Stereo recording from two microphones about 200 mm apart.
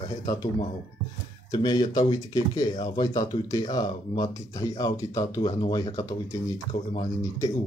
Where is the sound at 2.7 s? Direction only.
35° left (ahead or behind).